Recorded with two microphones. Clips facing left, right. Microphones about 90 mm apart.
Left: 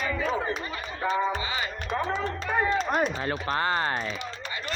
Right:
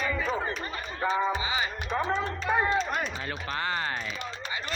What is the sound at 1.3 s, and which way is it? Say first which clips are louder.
Speech: right 1 dB; 15° right (ahead or behind).